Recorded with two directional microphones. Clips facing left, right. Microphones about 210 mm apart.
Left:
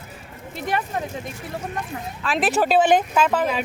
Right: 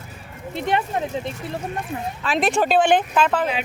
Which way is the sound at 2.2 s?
Centre (ahead or behind).